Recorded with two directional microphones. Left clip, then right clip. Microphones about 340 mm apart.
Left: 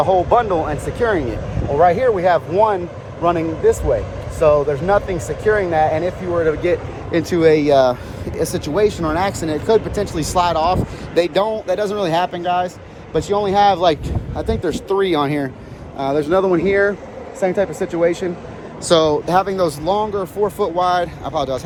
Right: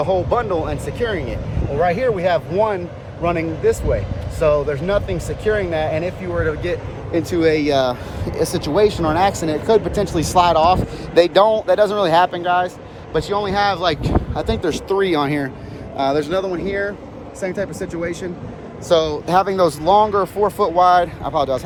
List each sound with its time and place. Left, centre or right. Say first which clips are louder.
0.1 s speech: left 4 dB; centre
7.1 s speech: left 3 dB; left
7.7 s speech: left 4 dB; centre
16.3 s speech: left 6 dB; centre
18.9 s speech: left 2 dB; left
19.1 s speech: even; centre